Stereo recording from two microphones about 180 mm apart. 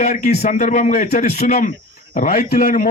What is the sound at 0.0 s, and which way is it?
A man's voice, 40° left (ahead or behind).